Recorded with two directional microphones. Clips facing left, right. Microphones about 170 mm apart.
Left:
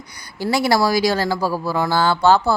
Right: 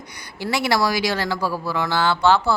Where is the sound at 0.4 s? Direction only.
35° left (ahead or behind).